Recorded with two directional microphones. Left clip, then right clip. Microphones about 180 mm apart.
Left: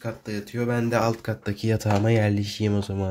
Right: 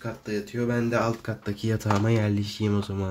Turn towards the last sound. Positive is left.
turn(degrees=10)  # may be behind; listen again after turning